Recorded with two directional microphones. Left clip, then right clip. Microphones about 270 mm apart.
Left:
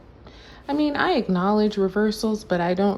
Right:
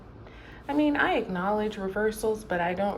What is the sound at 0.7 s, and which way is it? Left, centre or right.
Speech, left.